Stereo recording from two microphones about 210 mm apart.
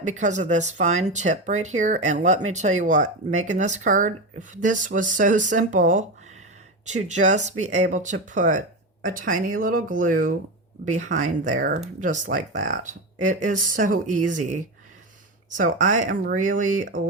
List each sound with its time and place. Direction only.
0.0 s speech: 35° right (ahead or behind)